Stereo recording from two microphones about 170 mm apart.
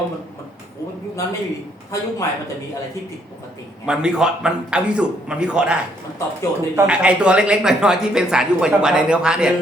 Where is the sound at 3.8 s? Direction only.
5° right (ahead or behind).